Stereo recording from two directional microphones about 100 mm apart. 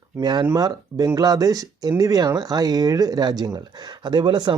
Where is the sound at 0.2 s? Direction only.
45° right (ahead or behind).